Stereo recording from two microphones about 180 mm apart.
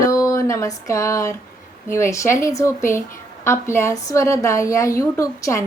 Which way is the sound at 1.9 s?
15° left (ahead or behind).